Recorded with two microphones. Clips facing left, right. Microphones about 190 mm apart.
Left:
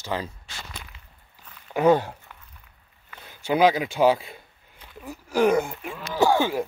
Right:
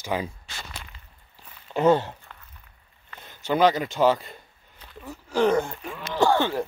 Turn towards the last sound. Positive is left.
turn(degrees=10)  # may be behind; listen again after turning